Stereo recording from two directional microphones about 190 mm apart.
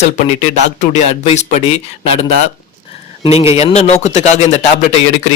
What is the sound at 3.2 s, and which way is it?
A man's voice, 35° left (ahead or behind).